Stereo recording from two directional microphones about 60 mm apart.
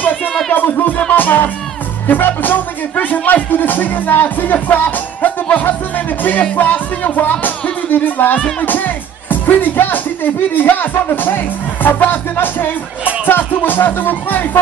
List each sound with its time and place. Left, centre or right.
1.1 s speech: left